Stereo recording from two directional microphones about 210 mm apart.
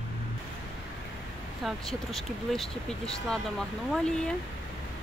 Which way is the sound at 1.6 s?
Centre (ahead or behind).